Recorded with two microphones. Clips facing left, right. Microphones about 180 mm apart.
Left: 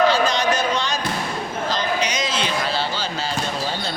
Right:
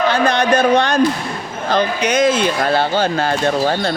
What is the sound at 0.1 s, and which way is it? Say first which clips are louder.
Speech: right 4 dB; 60° right (ahead or behind).